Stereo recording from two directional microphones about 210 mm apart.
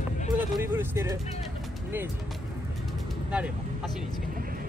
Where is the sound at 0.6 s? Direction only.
10° right (ahead or behind).